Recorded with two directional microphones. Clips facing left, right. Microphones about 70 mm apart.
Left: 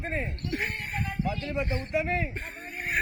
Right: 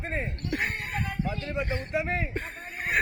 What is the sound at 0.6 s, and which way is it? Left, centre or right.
Speech, right.